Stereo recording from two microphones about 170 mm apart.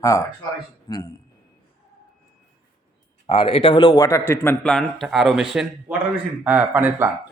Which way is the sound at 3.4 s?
30° left (ahead or behind).